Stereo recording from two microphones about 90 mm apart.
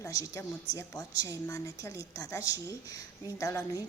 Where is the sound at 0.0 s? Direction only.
35° left (ahead or behind).